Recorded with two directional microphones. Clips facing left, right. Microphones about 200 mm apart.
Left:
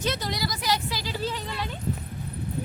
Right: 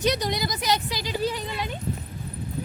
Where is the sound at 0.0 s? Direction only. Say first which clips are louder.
Right 4 dB; 15° right (ahead or behind).